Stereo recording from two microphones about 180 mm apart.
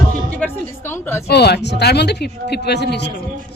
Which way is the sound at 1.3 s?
65° left (ahead or behind).